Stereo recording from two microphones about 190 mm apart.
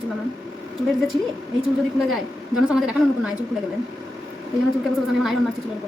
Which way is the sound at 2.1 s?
5° right (ahead or behind).